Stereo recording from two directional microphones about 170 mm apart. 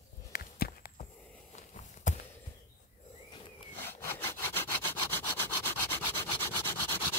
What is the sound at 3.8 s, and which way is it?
Sawing, 15° left (ahead or behind).